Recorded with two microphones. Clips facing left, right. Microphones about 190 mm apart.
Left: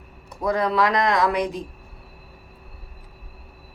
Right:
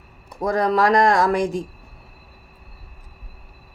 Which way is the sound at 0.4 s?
45° right (ahead or behind).